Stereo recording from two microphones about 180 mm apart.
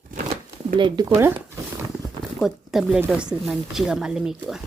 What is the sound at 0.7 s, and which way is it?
Speech, 25° right (ahead or behind).